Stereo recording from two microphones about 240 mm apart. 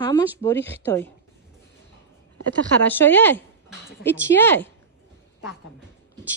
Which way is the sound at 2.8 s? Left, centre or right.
Centre.